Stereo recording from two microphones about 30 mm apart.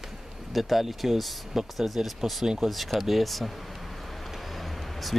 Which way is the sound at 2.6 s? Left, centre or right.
Centre.